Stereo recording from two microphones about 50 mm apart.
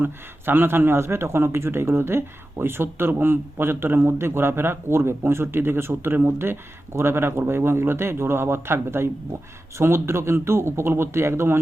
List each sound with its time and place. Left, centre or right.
0.0 s speech: right